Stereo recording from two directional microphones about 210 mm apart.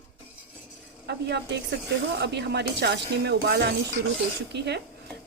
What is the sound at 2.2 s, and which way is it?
Speech, 55° right (ahead or behind).